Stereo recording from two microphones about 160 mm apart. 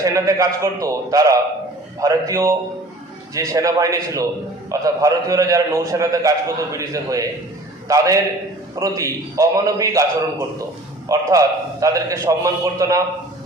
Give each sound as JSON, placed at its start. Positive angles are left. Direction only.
{"t": 0.0, "sound": "a man's voice", "side_deg": -20}
{"t": 11.1, "sound": "a man's voice", "side_deg": -20}